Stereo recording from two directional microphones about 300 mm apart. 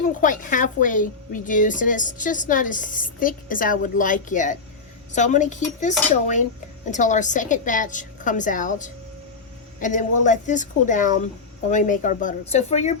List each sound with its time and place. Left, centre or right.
0.2 s a woman's voice: left